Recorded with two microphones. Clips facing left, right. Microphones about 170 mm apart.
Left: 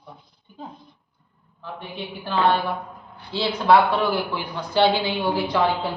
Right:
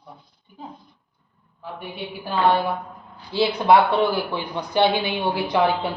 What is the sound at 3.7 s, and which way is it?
A woman's voice, 20° right (ahead or behind).